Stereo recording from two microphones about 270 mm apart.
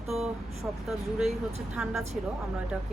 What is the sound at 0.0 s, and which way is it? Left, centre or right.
Vehicle, centre.